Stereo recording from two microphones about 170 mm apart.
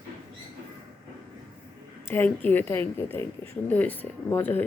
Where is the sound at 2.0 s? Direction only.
10° left (ahead or behind).